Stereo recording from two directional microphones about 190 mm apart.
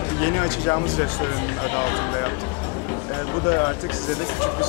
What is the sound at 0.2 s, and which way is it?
Speech, 15° left (ahead or behind).